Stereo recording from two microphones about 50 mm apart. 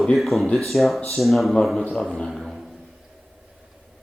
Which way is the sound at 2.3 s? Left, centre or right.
Centre.